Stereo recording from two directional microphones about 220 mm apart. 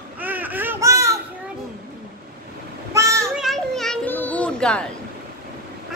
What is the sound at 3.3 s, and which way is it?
Children playing, centre (ahead or behind).